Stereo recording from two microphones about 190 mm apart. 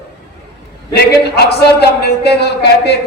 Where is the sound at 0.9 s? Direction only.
60° left (ahead or behind).